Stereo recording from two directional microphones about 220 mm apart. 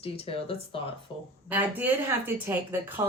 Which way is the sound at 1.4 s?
10° right (ahead or behind).